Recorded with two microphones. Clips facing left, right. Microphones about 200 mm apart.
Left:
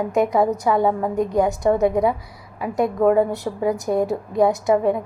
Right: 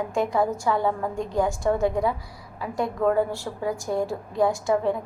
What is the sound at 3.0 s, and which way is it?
A woman's voice, 20° left (ahead or behind).